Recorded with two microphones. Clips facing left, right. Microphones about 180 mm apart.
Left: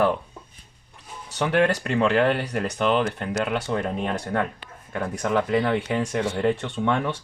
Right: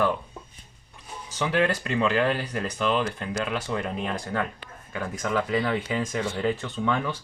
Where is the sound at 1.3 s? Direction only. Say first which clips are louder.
Left 3 dB; 65° left (ahead or behind).